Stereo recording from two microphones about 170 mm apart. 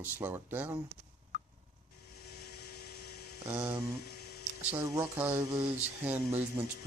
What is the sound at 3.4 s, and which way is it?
Speech, 15° right (ahead or behind).